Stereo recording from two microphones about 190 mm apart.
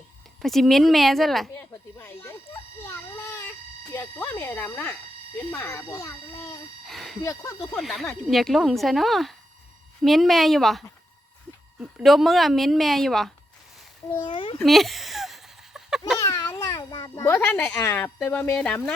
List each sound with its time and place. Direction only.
0.4 s a woman's voice: centre (ahead or behind)
2.0 s a sound: 10° left (ahead or behind)
5.5 s speech: 10° left (ahead or behind)
6.8 s speech: centre (ahead or behind)
7.2 s speech: 15° left (ahead or behind)
7.8 s a woman's voice: centre (ahead or behind)
14.3 s a child's voice: 25° left (ahead or behind)
14.6 s a sound: centre (ahead or behind)
16.2 s a child's voice: 15° left (ahead or behind)